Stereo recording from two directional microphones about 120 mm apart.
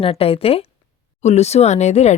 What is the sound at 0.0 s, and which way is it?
Speech, 55° left (ahead or behind).